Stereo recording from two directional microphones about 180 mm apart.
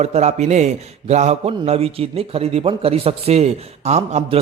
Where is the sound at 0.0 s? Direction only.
35° right (ahead or behind).